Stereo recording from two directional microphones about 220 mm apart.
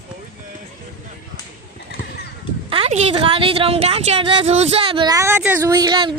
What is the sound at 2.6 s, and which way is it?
A woman's voice, 25° right (ahead or behind).